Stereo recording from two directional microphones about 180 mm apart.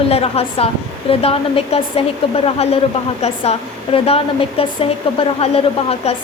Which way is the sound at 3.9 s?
30° left (ahead or behind).